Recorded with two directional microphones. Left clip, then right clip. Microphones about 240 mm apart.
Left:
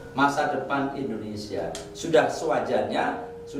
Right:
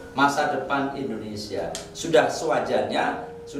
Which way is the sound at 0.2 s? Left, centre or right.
Centre.